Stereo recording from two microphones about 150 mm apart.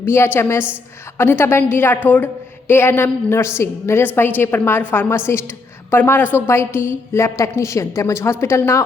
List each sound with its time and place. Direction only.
0.0 s a woman's voice: 15° left (ahead or behind)